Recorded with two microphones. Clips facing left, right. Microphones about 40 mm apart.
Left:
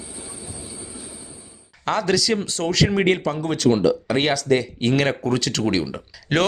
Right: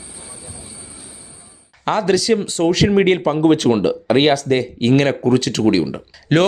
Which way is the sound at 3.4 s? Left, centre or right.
Right.